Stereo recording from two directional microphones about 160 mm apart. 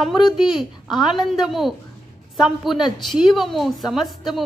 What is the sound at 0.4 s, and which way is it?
A woman's voice, centre (ahead or behind).